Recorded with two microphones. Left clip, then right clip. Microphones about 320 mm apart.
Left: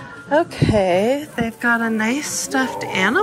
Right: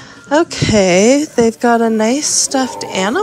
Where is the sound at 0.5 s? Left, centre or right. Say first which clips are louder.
Right 4 dB; right.